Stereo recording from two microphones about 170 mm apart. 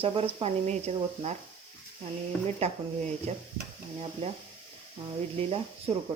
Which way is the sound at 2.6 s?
35° right (ahead or behind).